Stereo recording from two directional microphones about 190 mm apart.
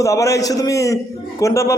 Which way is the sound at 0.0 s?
15° left (ahead or behind).